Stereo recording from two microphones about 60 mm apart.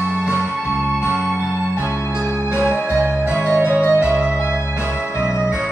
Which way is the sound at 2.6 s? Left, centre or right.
Left.